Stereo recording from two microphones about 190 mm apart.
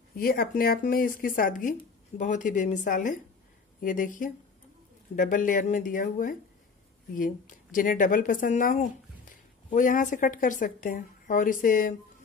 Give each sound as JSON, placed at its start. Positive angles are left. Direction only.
{"t": 0.1, "sound": "a woman's voice", "side_deg": 50}